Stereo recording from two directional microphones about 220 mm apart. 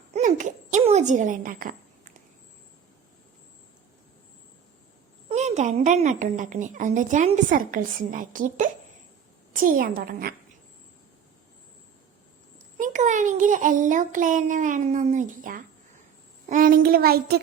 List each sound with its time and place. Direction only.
0.1 s a sound: 35° right (ahead or behind)
5.3 s a woman's voice: 30° right (ahead or behind)
12.7 s a woman's voice: 35° right (ahead or behind)